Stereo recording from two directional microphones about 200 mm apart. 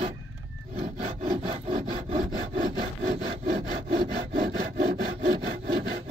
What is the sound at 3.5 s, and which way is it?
Sawing, 35° right (ahead or behind).